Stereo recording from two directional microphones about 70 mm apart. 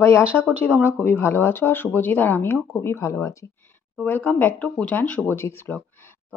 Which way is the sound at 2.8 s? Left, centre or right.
Left.